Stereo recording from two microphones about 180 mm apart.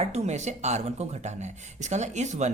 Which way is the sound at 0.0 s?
35° right (ahead or behind).